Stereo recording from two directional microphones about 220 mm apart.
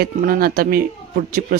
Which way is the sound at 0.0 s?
40° right (ahead or behind).